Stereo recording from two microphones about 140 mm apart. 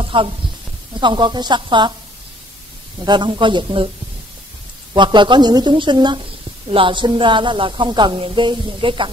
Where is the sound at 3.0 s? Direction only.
30° right (ahead or behind).